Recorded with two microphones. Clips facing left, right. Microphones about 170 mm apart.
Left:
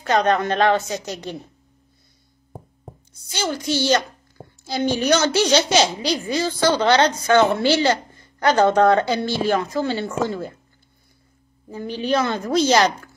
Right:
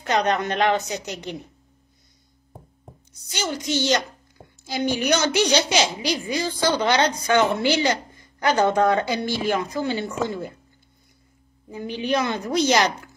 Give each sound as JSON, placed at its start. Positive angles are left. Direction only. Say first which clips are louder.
{"t": 0.0, "sound": "a woman's voice", "louder": "left 3 dB", "side_deg": -15}
{"t": 3.3, "sound": "a woman's voice", "louder": "left 2 dB", "side_deg": -20}
{"t": 8.2, "sound": "a sound", "louder": "left 3 dB", "side_deg": -15}
{"t": 9.1, "sound": "a woman's voice", "louder": "left 3 dB", "side_deg": -15}
{"t": 11.7, "sound": "a woman's voice", "louder": "left 2 dB", "side_deg": -15}